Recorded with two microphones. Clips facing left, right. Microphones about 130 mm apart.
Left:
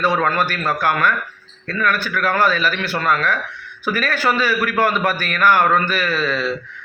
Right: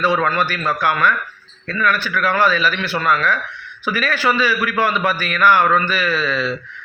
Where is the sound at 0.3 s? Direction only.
45° left (ahead or behind).